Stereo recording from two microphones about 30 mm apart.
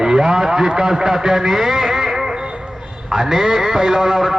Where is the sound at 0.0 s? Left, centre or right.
Right.